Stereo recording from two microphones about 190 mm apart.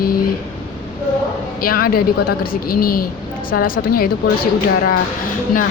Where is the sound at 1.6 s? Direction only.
50° left (ahead or behind).